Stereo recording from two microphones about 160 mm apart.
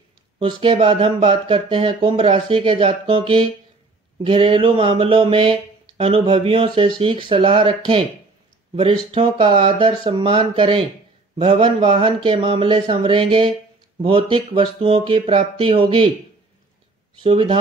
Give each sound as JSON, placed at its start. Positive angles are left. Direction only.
{"t": 0.4, "sound": "speech", "side_deg": -35}
{"t": 17.2, "sound": "speech", "side_deg": -35}